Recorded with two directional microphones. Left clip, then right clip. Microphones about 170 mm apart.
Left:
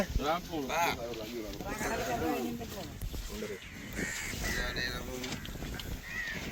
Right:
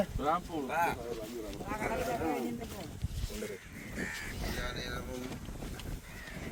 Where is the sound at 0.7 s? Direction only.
65° right (ahead or behind).